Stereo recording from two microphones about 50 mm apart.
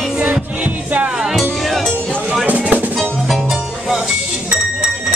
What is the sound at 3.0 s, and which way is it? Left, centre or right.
Music, centre.